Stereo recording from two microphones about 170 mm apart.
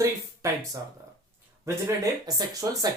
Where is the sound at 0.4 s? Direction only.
20° right (ahead or behind).